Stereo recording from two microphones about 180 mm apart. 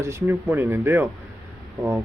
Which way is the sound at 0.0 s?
15° right (ahead or behind).